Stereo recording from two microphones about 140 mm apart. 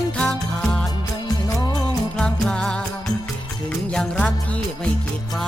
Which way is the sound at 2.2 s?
5° left (ahead or behind).